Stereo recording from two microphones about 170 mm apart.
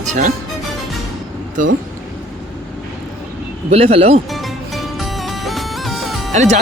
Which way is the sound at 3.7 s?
35° right (ahead or behind).